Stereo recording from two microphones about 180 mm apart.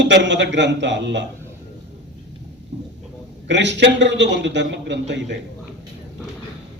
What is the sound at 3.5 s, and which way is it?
A man's voice, 80° right.